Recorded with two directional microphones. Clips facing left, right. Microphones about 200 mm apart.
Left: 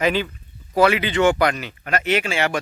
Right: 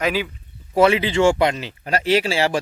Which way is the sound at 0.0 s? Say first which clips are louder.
Left 1 dB; 5° right (ahead or behind).